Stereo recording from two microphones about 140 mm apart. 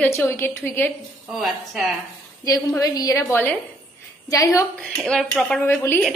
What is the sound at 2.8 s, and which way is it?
Speech, 25° left (ahead or behind).